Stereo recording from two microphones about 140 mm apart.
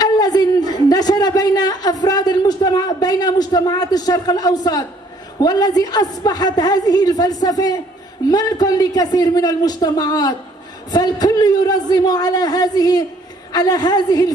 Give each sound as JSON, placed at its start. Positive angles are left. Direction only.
{"t": 0.0, "sound": "a man's voice", "side_deg": 30}